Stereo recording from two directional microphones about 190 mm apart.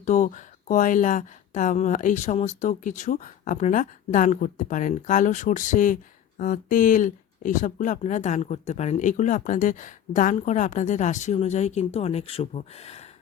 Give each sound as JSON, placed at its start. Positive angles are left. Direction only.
{"t": 0.0, "sound": "speech", "side_deg": 40}